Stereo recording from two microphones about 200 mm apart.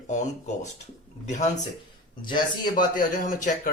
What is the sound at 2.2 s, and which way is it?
Speech, 20° left (ahead or behind).